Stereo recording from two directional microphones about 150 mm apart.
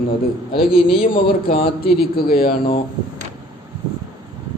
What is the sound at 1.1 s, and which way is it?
A man's voice, 90° left.